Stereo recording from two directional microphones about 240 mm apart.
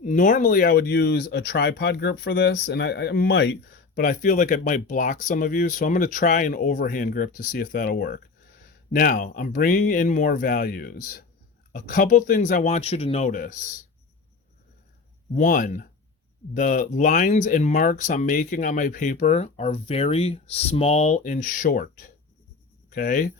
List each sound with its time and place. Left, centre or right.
0.0 s speech: left
15.4 s speech: left